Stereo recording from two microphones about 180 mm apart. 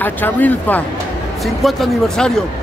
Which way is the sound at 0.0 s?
10° left (ahead or behind).